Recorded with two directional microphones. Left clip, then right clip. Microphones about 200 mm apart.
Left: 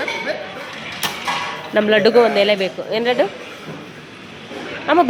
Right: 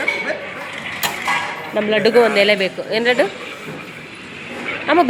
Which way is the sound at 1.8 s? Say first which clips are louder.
Left 2 dB; 15° left (ahead or behind).